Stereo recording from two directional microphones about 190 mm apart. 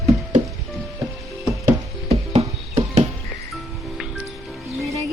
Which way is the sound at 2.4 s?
35° right (ahead or behind).